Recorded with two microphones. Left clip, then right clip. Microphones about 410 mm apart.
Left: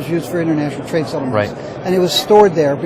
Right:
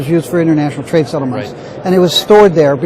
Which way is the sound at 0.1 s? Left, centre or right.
Right.